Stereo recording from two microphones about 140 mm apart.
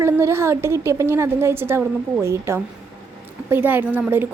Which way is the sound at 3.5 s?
15° right (ahead or behind).